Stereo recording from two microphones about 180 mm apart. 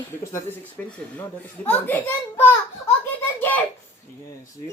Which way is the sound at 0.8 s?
10° left (ahead or behind).